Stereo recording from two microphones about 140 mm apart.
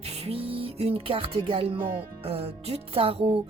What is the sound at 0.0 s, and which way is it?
Music, 45° right (ahead or behind).